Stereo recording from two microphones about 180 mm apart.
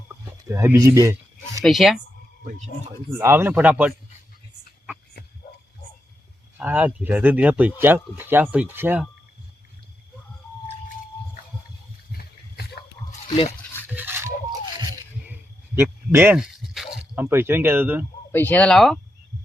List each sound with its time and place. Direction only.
0.4 s speech: 15° right (ahead or behind)
1.6 s speech: centre (ahead or behind)
2.4 s speech: 45° right (ahead or behind)
3.1 s speech: 15° right (ahead or behind)
6.6 s speech: 10° right (ahead or behind)
12.1 s a sound: 65° left (ahead or behind)
13.2 s speech: 30° left (ahead or behind)
13.8 s a sound: 10° right (ahead or behind)
15.3 s a sound: 10° right (ahead or behind)
18.3 s speech: 10° left (ahead or behind)